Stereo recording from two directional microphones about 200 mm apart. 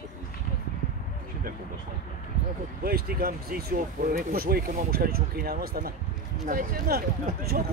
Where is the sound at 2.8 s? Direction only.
50° right (ahead or behind).